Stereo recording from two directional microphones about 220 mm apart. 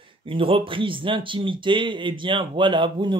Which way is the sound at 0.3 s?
25° right (ahead or behind).